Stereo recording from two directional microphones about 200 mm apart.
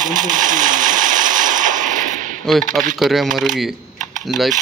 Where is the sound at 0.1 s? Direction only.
40° right (ahead or behind).